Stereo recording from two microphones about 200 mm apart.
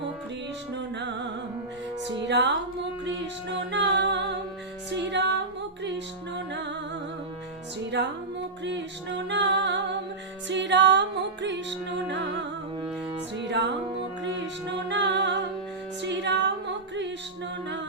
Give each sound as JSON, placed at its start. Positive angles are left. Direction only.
{"t": 0.8, "sound": "music", "side_deg": -60}
{"t": 3.5, "sound": "music", "side_deg": -60}
{"t": 6.5, "sound": "music", "side_deg": -60}
{"t": 7.9, "sound": "music", "side_deg": -60}
{"t": 13.5, "sound": "music", "side_deg": -55}